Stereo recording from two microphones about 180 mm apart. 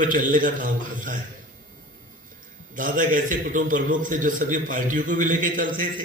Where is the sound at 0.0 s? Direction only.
50° right (ahead or behind).